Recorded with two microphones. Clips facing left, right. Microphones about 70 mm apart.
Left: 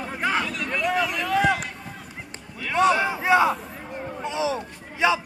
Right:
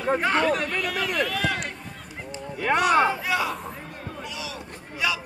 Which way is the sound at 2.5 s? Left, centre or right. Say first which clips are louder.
Right 5 dB; right.